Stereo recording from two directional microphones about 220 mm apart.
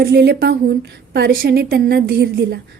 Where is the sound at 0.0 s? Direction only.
45° right (ahead or behind).